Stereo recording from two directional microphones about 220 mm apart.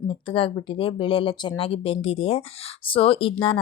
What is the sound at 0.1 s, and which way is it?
Speech, 25° left (ahead or behind).